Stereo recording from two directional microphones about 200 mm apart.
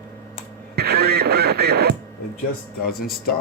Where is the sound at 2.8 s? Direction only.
50° left (ahead or behind).